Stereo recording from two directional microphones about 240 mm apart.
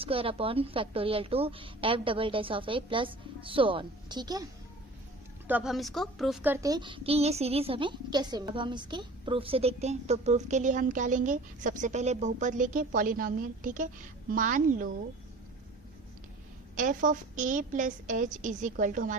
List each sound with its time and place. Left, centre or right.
0.0 s a child's voice: right
5.5 s a child's voice: centre; by 14.9 s right
16.7 s a woman's voice: right